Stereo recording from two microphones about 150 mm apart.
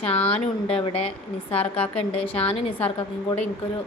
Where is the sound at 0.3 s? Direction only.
40° left (ahead or behind).